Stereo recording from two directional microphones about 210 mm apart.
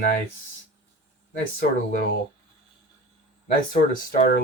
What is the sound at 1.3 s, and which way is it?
Speech, 40° left (ahead or behind).